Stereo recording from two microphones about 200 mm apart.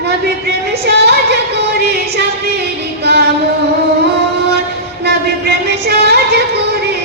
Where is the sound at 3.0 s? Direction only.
55° right (ahead or behind).